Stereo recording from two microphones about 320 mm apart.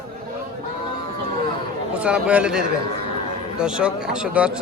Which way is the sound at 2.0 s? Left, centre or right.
Centre.